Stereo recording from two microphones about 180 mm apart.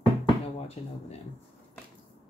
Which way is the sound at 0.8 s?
35° left (ahead or behind).